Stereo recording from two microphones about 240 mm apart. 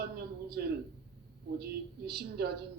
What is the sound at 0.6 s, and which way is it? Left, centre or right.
A woman's voice, right.